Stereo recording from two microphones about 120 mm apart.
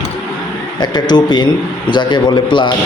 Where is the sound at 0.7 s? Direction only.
35° left (ahead or behind).